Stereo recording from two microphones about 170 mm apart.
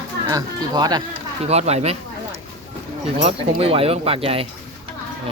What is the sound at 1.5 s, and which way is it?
Speech, 40° right (ahead or behind).